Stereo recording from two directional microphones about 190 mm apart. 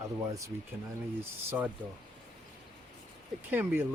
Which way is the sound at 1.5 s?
10° right (ahead or behind).